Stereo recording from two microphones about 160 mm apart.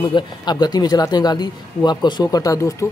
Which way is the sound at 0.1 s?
25° left (ahead or behind).